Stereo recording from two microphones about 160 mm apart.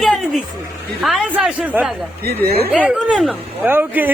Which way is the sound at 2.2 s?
80° right.